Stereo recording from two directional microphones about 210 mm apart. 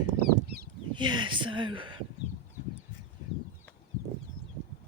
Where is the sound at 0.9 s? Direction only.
20° right (ahead or behind).